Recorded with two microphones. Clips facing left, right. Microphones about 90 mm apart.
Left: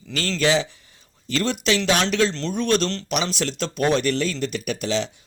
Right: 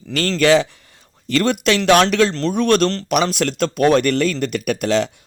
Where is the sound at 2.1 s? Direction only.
65° right (ahead or behind).